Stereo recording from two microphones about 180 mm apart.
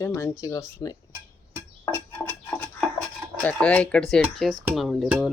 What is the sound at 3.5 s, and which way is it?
Speech, 5° left (ahead or behind).